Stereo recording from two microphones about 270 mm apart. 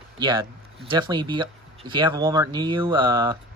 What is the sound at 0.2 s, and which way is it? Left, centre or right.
Speech, centre.